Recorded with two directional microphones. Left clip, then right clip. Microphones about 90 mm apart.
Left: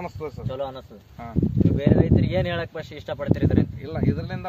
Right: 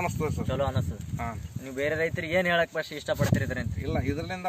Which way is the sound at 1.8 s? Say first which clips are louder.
Left 3 dB; 45° left (ahead or behind).